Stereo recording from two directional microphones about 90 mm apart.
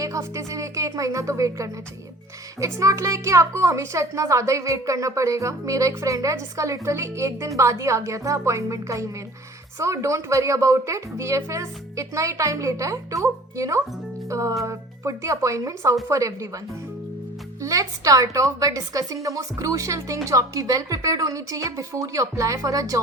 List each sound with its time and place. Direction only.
0.0 s a woman's voice: 35° right (ahead or behind)
14.3 s music: 35° right (ahead or behind)
14.6 s a woman's voice: 35° right (ahead or behind)
17.6 s a woman's voice: 40° right (ahead or behind)